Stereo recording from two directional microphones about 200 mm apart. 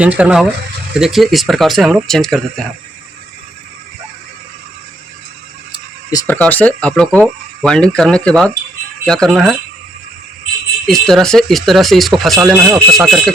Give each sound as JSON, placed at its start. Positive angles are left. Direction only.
{"t": 0.0, "sound": "speech", "side_deg": -5}
{"t": 5.7, "sound": "a sound", "side_deg": 20}
{"t": 6.3, "sound": "speech", "side_deg": 10}
{"t": 10.8, "sound": "speech", "side_deg": 0}